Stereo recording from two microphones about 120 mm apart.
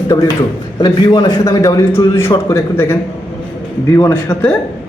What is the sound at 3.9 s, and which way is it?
Speech, 25° left (ahead or behind).